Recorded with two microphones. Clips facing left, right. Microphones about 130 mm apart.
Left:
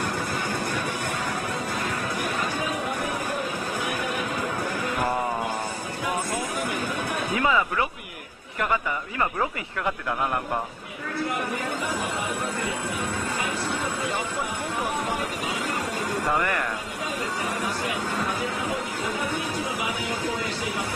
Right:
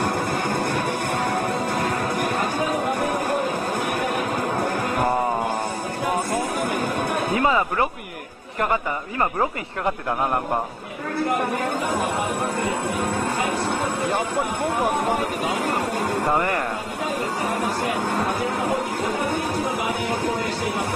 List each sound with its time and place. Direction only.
0.0 s music: 55° right (ahead or behind)
6.0 s a sound: 45° right (ahead or behind)
11.5 s speech: 55° right (ahead or behind)
16.3 s speech: 30° right (ahead or behind)
17.6 s speech: 55° right (ahead or behind)